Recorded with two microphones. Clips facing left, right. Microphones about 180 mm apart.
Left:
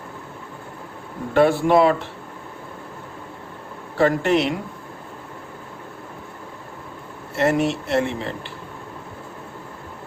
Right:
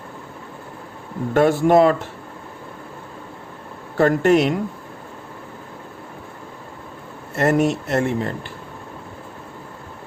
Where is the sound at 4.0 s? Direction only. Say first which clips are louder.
Right 3 dB; 50° right (ahead or behind).